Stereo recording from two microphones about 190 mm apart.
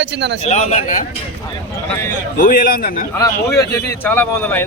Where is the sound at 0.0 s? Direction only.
65° right (ahead or behind).